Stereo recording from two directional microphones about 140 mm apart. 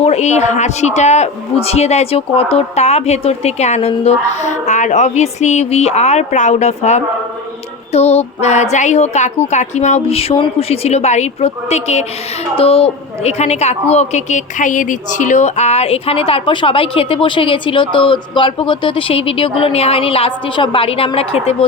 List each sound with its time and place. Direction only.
0.0 s a man's voice: 50° left (ahead or behind)